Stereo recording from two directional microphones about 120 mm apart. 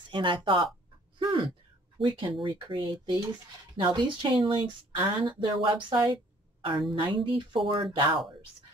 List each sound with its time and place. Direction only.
0.1 s a woman's voice: 45° right (ahead or behind)
1.2 s a sound: 45° right (ahead or behind)
2.0 s a woman's voice: 45° right (ahead or behind)